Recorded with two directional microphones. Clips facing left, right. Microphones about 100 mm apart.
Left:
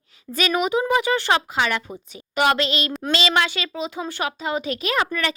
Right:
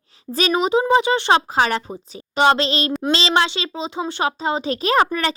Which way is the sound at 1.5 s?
35° right (ahead or behind).